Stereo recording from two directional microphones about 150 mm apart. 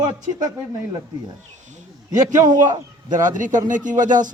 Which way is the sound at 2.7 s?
25° right (ahead or behind).